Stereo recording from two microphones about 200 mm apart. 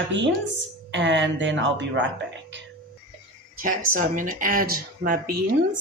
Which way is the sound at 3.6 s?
40° right (ahead or behind).